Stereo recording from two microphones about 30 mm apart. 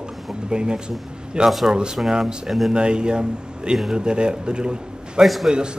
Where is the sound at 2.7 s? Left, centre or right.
Right.